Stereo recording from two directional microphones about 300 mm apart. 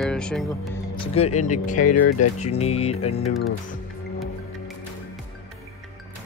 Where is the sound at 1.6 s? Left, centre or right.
Left.